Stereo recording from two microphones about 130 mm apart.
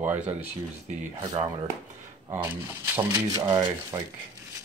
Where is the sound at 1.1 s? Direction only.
40° right (ahead or behind).